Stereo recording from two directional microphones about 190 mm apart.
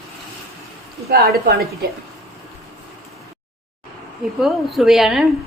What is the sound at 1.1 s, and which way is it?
Speech, 55° right (ahead or behind).